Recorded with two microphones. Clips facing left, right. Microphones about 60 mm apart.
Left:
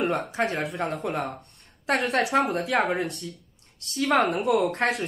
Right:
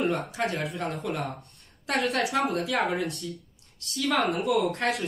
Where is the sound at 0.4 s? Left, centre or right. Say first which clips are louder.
Left 3 dB; left.